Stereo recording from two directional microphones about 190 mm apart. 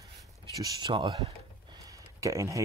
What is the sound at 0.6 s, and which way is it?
Speech, 25° right (ahead or behind).